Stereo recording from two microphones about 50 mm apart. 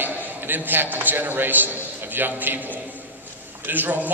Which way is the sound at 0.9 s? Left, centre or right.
Right.